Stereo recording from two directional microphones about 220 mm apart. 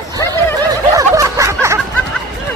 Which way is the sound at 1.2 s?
15° right (ahead or behind).